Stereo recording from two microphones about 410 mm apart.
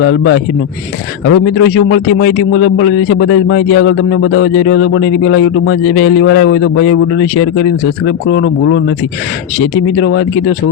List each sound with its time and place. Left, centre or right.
0.0 s a man's voice: left
8.3 s a man's voice: left
10.0 s a man's voice: left